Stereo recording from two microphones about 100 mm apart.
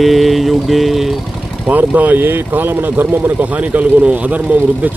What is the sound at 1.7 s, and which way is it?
Speech, 15° right (ahead or behind).